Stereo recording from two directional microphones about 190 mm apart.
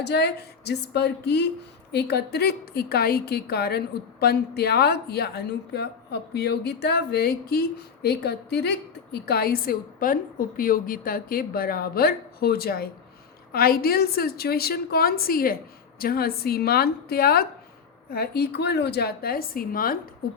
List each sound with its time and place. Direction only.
0.0 s a woman's voice: 60° left (ahead or behind)